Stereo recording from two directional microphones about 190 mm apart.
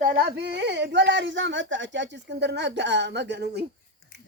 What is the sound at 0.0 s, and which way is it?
Speech, 55° right (ahead or behind).